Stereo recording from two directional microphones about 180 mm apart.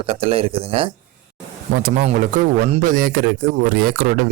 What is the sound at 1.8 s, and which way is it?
Speech, 40° right (ahead or behind).